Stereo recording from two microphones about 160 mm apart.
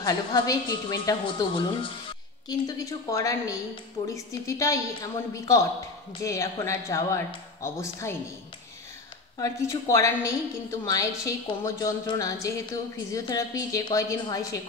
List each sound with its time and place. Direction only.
0.0 s a woman's voice: 25° left (ahead or behind)
9.4 s a woman's voice: 20° left (ahead or behind)